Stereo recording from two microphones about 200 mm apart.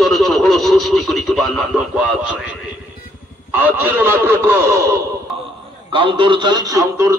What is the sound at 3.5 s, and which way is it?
A man's voice, 10° right (ahead or behind).